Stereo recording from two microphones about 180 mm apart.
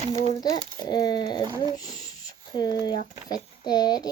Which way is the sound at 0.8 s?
20° left (ahead or behind).